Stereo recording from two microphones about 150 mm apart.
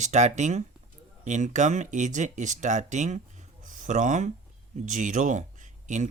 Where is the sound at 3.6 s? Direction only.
60° right (ahead or behind).